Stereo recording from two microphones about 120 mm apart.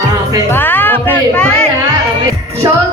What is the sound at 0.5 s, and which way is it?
Music, 15° left (ahead or behind).